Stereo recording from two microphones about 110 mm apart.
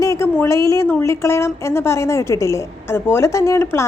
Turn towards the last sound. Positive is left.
turn(degrees=25)  # may be behind; listen again after turning